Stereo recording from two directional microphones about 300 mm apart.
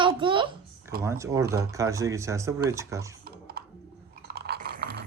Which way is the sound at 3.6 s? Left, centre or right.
Right.